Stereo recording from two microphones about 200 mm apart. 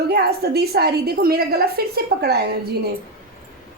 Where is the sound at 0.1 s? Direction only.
50° right (ahead or behind).